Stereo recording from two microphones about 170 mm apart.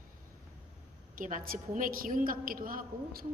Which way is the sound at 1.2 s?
50° right (ahead or behind).